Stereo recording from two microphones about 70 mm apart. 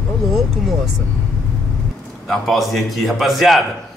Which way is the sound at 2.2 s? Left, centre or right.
Centre.